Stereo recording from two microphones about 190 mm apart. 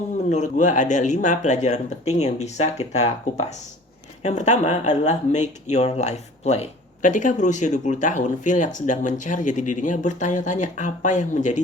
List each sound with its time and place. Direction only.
0.3 s speech: 40° left (ahead or behind)